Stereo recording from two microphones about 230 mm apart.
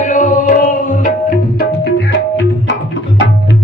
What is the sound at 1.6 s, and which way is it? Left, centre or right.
Music, left.